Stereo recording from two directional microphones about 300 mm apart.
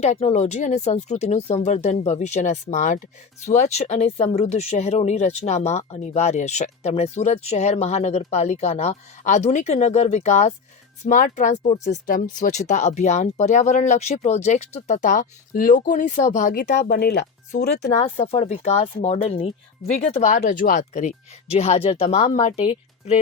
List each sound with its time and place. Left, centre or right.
0.0 s speech: left
18.0 s speech: centre